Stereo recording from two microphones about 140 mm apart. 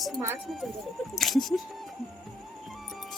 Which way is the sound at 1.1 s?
Centre (ahead or behind).